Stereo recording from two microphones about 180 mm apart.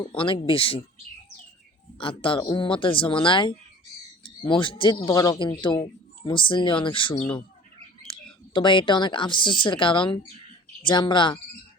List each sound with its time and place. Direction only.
0.2 s speech: 30° left (ahead or behind)
2.0 s speech: 30° left (ahead or behind)